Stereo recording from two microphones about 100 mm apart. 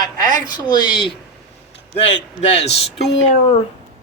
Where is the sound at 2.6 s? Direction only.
90° left.